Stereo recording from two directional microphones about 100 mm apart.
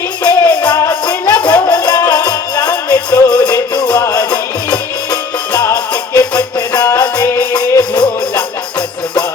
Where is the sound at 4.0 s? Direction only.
30° left (ahead or behind).